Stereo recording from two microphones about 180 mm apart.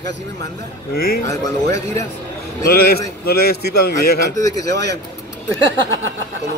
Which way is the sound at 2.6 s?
60° left (ahead or behind).